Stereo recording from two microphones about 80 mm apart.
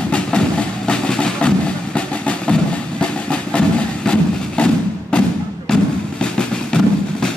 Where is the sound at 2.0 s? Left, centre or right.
Centre.